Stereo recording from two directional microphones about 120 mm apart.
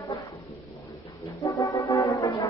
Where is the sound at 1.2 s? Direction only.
25° left (ahead or behind).